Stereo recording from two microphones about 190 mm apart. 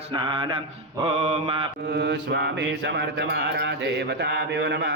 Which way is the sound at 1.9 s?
65° right (ahead or behind).